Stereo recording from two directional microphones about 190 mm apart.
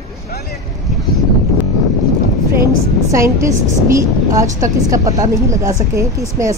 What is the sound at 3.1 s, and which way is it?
Speech, 15° right (ahead or behind).